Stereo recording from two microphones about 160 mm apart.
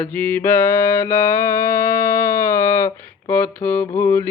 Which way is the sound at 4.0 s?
15° left (ahead or behind).